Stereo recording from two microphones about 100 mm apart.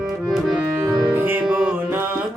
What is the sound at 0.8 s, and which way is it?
Piano, 45° right (ahead or behind).